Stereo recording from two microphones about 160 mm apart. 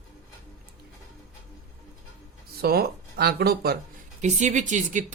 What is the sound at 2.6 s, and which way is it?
Speech, 75° right (ahead or behind).